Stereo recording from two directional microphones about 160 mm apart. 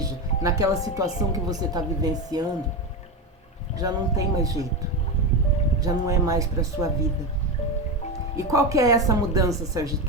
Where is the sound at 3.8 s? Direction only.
20° right (ahead or behind).